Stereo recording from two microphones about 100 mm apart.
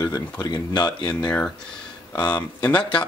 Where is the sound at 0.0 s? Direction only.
35° left (ahead or behind).